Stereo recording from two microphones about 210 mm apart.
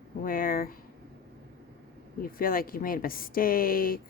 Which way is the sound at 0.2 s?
40° left (ahead or behind).